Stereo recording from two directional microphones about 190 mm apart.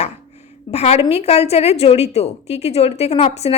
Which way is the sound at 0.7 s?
35° left (ahead or behind).